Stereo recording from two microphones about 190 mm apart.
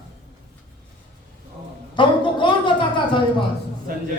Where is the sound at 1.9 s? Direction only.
25° left (ahead or behind).